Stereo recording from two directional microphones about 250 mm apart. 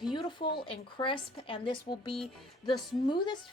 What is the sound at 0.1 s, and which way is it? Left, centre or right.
A woman's voice, centre.